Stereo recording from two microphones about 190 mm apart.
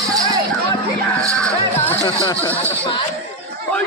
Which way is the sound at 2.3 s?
15° left (ahead or behind).